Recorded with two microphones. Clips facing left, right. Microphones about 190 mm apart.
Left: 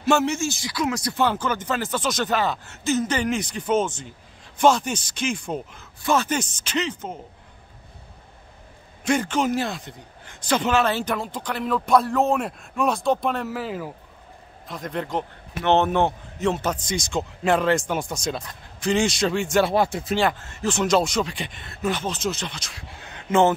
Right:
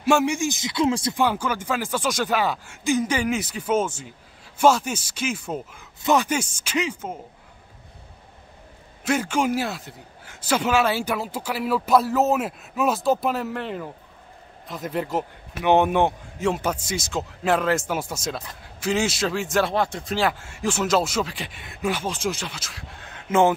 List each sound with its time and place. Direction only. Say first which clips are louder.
0.0 s speech: right 1 dB; 10° right (ahead or behind)
1.1 s speech: even; 10° right (ahead or behind)
9.0 s speech: left 1 dB; 5° right (ahead or behind)